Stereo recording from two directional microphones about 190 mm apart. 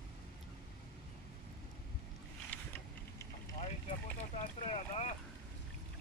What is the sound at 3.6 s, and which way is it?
Boat, 35° left (ahead or behind).